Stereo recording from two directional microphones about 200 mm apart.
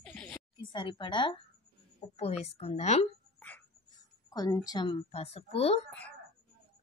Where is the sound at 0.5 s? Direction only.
25° left (ahead or behind).